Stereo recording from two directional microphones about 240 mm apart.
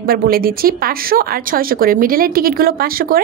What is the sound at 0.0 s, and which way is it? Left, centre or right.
A woman's voice, right.